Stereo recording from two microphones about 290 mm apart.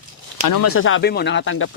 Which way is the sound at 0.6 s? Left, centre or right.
Left.